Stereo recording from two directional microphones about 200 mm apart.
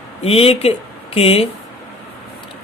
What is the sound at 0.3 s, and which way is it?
Speech, 30° left (ahead or behind).